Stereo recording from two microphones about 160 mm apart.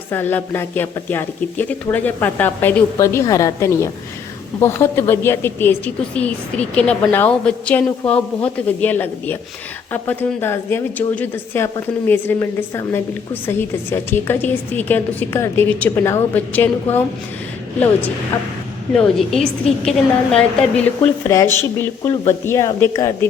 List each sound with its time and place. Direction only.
0.1 s a woman's voice: 10° left (ahead or behind)
18.9 s a woman's voice: 5° left (ahead or behind); by 23.1 s 20° left (ahead or behind)